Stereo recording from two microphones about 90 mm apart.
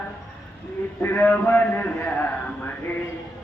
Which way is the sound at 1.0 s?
20° left (ahead or behind).